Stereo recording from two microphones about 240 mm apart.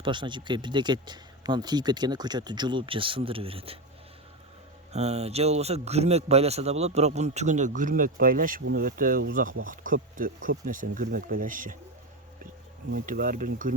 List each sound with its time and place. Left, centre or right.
0.0 s speech: centre
4.9 s speech: right
12.9 s speech: right